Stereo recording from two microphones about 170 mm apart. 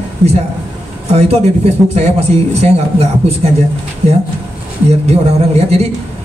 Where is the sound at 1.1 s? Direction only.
40° right (ahead or behind).